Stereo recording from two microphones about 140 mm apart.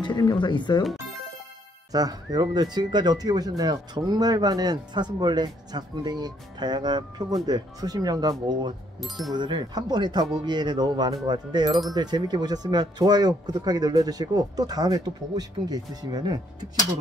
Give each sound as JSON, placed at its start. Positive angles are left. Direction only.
{"t": 0.0, "sound": "speech", "side_deg": 30}
{"t": 1.9, "sound": "speech", "side_deg": -25}
{"t": 9.0, "sound": "speech", "side_deg": 0}
{"t": 9.3, "sound": "speech", "side_deg": -35}